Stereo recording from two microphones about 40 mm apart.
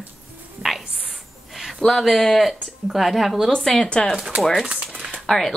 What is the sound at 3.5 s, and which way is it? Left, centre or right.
Speech, centre.